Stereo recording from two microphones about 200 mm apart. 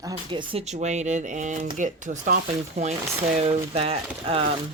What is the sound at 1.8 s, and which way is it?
Mechanisms, 40° right (ahead or behind).